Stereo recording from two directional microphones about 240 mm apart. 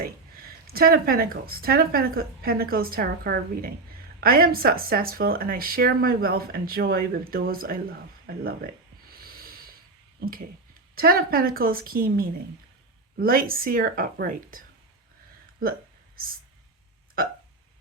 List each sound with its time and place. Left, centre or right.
0.0 s speech: right